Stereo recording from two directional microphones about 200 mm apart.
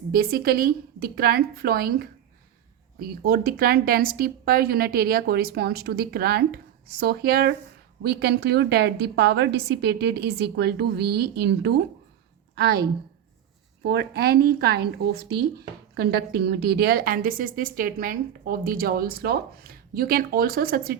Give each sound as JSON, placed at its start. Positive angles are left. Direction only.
{"t": 0.1, "sound": "a woman's voice", "side_deg": -50}
{"t": 13.8, "sound": "speech", "side_deg": -55}